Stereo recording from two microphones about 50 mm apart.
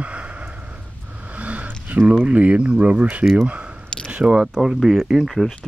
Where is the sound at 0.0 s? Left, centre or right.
Right.